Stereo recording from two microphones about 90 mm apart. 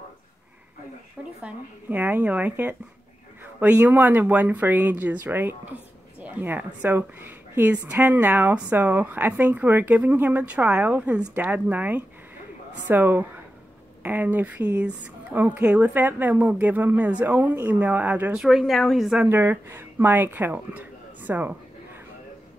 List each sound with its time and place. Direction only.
1.4 s a woman's voice: 20° right (ahead or behind)
18.4 s a woman's voice: 5° right (ahead or behind)
19.2 s speech: 20° right (ahead or behind)